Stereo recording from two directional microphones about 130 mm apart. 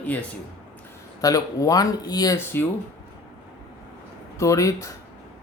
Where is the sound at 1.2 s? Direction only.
25° left (ahead or behind).